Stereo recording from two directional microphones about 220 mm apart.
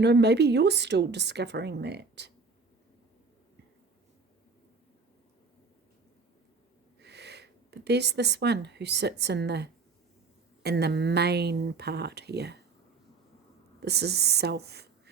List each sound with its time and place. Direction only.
0.0 s speech: 50° right (ahead or behind)
7.0 s speech: 50° right (ahead or behind)
13.8 s speech: 50° right (ahead or behind)